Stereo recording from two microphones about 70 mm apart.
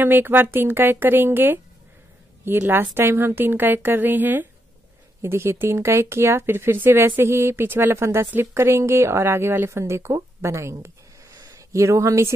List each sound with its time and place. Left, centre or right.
0.0 s speech: right
2.9 s speech: right
5.2 s a woman's voice: right